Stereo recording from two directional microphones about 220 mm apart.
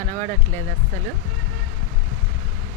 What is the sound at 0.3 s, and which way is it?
Speech, 10° left (ahead or behind).